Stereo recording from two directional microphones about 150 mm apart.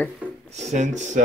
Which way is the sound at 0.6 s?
50° right (ahead or behind).